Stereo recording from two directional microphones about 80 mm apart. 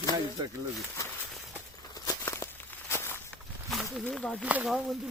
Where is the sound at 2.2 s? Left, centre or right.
Left.